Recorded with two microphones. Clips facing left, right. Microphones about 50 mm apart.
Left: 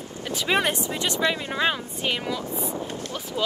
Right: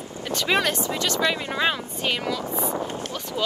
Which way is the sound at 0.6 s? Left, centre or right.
Left.